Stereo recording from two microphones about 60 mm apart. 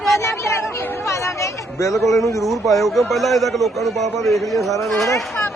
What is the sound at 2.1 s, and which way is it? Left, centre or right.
Speech, left.